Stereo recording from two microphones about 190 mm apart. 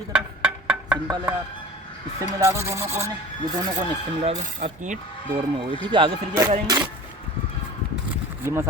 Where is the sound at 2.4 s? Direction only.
15° right (ahead or behind).